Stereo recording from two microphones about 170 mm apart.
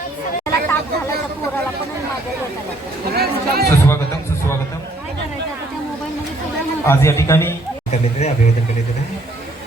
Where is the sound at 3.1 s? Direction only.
65° right (ahead or behind).